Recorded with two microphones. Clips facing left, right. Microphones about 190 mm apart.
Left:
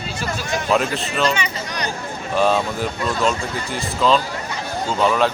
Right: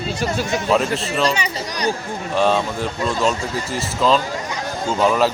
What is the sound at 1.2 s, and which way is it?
Speech, 35° right (ahead or behind).